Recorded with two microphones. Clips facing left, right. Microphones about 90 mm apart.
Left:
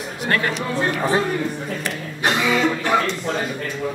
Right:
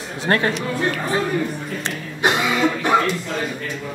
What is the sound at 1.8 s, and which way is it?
Speech, 20° right (ahead or behind).